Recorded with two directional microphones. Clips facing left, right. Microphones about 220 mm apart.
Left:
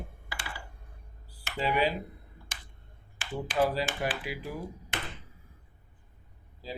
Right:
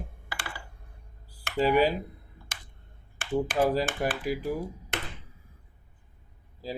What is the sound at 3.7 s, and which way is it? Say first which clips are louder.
Speech: right 4 dB; 50° right (ahead or behind).